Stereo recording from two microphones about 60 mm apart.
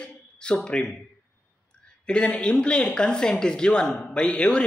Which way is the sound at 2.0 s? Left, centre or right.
Centre.